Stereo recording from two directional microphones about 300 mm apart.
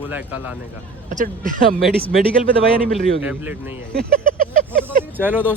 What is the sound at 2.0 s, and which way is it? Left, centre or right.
Speech, centre.